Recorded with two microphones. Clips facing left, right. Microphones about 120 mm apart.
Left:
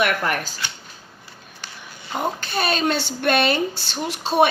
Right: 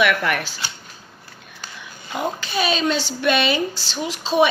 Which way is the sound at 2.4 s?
55° left (ahead or behind).